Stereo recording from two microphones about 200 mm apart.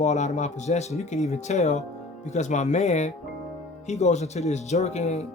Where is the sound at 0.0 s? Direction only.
35° left (ahead or behind).